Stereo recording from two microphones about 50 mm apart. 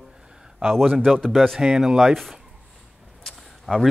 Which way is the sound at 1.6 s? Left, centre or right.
Centre.